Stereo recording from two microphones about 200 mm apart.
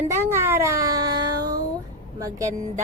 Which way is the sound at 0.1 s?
10° right (ahead or behind).